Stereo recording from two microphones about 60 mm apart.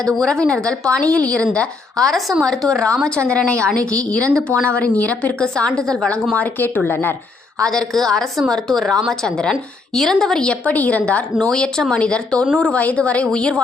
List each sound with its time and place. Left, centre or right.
0.1 s a woman's voice: centre
6.3 s speech: left
7.6 s a woman's voice: centre
11.5 s a woman's voice: centre